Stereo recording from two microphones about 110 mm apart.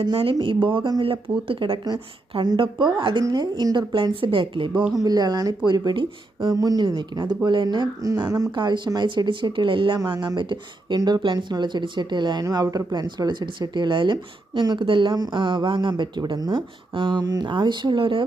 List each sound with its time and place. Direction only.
0.0 s speech: 50° right (ahead or behind)
4.2 s speech: 50° right (ahead or behind)
4.8 s speech: 5° right (ahead or behind)
5.0 s speech: 35° right (ahead or behind)
6.5 s speech: 35° right (ahead or behind)
8.0 s speech: 35° right (ahead or behind)
8.5 s speech: 45° right (ahead or behind)